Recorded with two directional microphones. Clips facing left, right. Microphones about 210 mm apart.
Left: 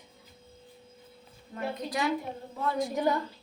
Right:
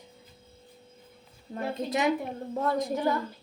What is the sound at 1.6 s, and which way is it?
Speech, 25° right (ahead or behind).